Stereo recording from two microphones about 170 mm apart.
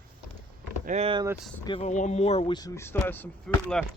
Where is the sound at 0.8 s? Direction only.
40° right (ahead or behind).